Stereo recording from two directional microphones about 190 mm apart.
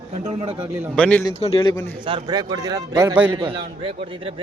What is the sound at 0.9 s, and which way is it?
Speech, 5° left (ahead or behind).